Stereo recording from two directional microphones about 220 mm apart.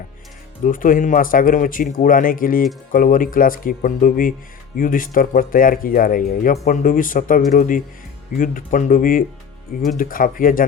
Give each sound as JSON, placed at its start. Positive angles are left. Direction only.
{"t": 0.6, "sound": "speech", "side_deg": 40}